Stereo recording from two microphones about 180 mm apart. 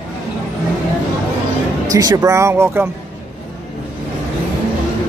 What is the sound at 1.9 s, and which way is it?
Speech, 20° right (ahead or behind).